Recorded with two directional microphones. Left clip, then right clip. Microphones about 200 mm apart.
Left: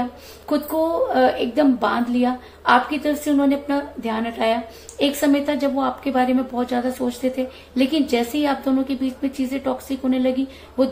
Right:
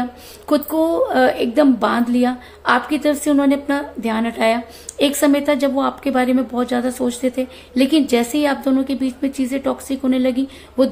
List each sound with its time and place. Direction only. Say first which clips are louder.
0.5 s a woman's voice: right 4 dB; 35° right (ahead or behind)